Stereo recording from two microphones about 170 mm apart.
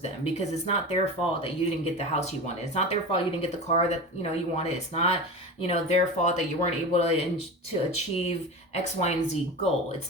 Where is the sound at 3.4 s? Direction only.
40° left (ahead or behind).